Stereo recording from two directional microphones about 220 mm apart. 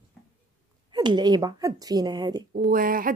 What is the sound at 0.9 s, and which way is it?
A woman's voice, 20° right (ahead or behind).